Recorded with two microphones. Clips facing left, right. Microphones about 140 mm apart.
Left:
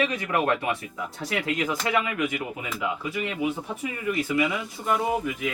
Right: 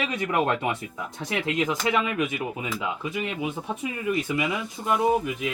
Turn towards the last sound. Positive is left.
turn(degrees=-20)  # may be behind; listen again after turning